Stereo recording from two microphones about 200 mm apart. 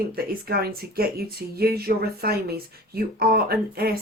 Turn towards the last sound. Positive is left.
turn(degrees=-50)  # may be behind; listen again after turning